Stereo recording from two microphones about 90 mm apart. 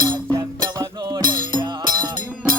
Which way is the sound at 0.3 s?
45° right (ahead or behind).